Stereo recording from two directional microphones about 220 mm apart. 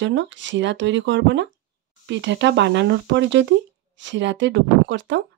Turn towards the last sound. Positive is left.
turn(degrees=-55)  # may be behind; listen again after turning